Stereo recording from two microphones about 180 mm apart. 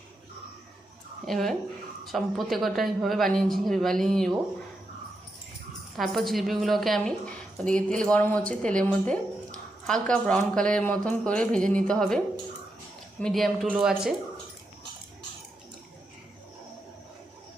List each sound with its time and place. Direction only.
1.3 s a woman's voice: centre (ahead or behind)
6.0 s a woman's voice: centre (ahead or behind)